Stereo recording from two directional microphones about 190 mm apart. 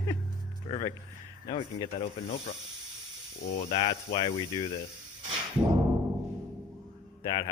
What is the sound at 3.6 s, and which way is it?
Speech, 30° left (ahead or behind).